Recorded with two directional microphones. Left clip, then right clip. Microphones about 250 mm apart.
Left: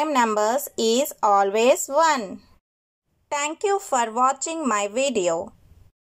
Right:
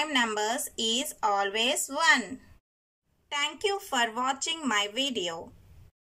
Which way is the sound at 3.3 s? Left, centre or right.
Centre.